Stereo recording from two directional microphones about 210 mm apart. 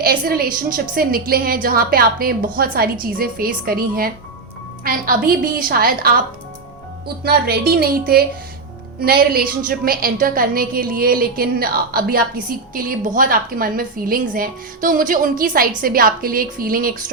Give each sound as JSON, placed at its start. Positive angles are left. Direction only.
{"t": 0.0, "sound": "a woman's voice", "side_deg": -45}
{"t": 7.3, "sound": "a woman's voice", "side_deg": -45}